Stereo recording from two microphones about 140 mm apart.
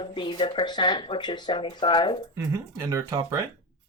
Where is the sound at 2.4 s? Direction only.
20° right (ahead or behind).